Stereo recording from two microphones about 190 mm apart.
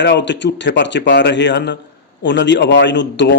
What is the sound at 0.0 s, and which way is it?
A man's voice, 70° left (ahead or behind).